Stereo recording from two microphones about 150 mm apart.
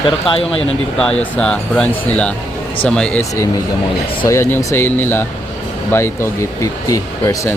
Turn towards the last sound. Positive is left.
turn(degrees=25)  # may be behind; listen again after turning